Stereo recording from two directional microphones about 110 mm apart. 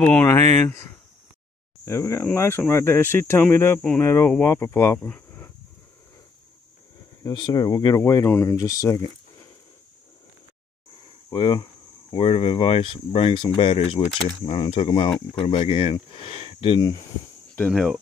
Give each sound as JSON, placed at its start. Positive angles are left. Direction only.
{"t": 0.0, "sound": "speech", "side_deg": 10}
{"t": 1.9, "sound": "speech", "side_deg": 25}
{"t": 7.2, "sound": "speech", "side_deg": 40}
{"t": 8.3, "sound": "speech", "side_deg": 25}
{"t": 11.3, "sound": "speech", "side_deg": 45}
{"t": 12.2, "sound": "speech", "side_deg": 55}
{"t": 14.4, "sound": "speech", "side_deg": 50}
{"t": 17.6, "sound": "speech", "side_deg": 5}